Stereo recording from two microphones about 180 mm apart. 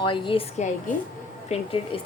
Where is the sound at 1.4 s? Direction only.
35° left (ahead or behind).